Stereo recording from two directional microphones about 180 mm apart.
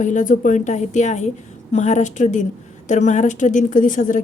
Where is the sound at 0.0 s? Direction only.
45° left (ahead or behind).